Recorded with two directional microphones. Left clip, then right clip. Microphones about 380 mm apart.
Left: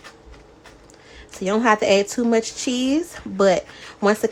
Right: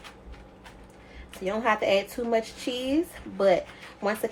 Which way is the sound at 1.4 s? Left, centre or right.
Left.